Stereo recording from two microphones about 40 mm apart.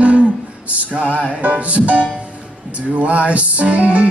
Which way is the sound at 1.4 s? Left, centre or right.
Right.